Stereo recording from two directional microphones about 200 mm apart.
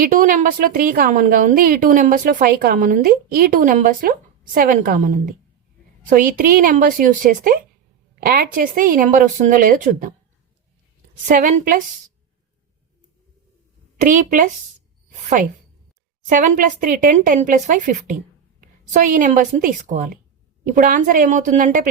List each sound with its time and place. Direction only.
0.0 s a woman's voice: 40° right (ahead or behind)
11.3 s a woman's voice: 40° right (ahead or behind)
14.0 s speech: 40° right (ahead or behind)
16.3 s speech: 40° right (ahead or behind)